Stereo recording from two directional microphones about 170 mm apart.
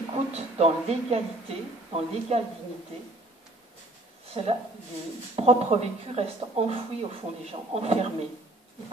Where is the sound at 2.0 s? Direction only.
35° right (ahead or behind).